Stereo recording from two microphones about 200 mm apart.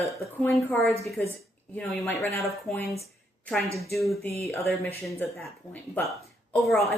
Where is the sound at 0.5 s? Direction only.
10° left (ahead or behind).